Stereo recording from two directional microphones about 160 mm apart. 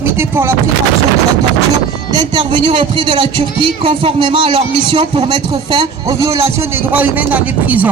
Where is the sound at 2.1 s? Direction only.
30° right (ahead or behind).